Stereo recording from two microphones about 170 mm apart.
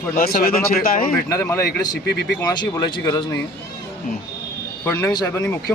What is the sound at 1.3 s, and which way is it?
Speech, 15° left (ahead or behind).